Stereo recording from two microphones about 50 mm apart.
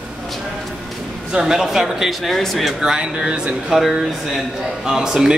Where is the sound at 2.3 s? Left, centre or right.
Centre.